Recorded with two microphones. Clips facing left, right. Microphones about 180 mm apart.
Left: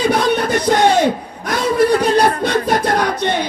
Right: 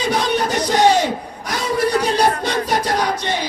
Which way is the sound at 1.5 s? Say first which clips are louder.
Left 6 dB; 55° left (ahead or behind).